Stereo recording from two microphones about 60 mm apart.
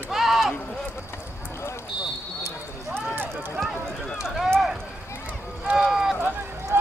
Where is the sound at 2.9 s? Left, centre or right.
Right.